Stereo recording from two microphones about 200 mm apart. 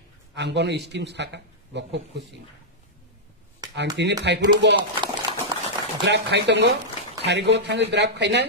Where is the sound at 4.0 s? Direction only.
60° right (ahead or behind).